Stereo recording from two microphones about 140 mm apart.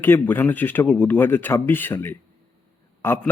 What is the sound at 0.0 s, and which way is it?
A man's voice, 15° left (ahead or behind).